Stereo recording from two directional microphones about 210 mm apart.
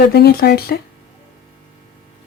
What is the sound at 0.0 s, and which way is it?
Speech, 50° left (ahead or behind).